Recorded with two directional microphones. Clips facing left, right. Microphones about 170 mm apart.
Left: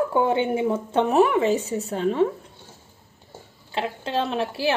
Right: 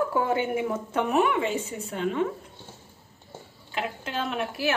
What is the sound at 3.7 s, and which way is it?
A woman's voice, 30° left (ahead or behind).